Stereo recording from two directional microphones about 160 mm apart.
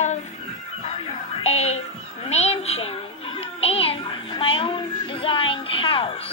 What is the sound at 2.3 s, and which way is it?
A child's voice, 40° left (ahead or behind).